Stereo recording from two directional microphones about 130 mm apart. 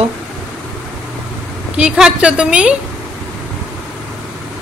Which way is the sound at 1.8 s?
10° right (ahead or behind).